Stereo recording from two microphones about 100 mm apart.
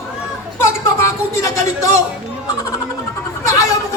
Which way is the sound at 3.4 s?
30° left (ahead or behind).